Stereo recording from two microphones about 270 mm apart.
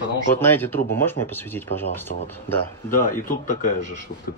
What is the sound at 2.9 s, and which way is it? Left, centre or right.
Speech, left.